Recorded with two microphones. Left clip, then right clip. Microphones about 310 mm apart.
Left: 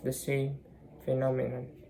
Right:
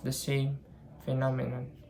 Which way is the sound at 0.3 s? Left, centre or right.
Right.